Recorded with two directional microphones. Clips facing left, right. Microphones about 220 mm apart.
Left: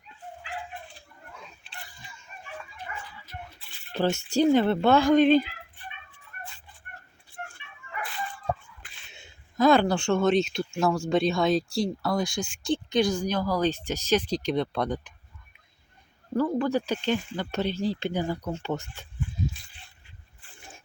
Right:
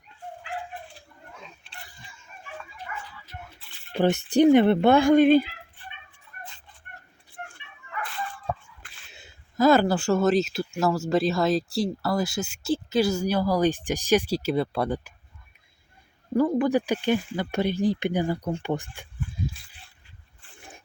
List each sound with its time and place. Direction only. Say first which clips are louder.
3.9 s speech: right 4 dB; 15° right (ahead or behind)
8.8 s a sound: even; centre (ahead or behind)
11.1 s speech: even; 5° right (ahead or behind)
16.3 s speech: right 3 dB; 15° right (ahead or behind)